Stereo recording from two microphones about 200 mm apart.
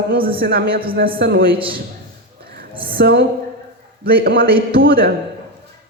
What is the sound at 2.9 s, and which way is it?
A woman's voice, 55° right (ahead or behind).